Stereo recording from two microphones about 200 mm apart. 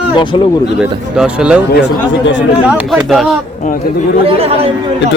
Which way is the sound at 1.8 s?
65° left (ahead or behind).